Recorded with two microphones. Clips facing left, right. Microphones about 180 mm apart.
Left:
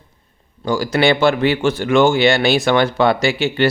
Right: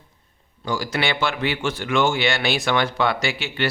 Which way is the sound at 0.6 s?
35° left (ahead or behind).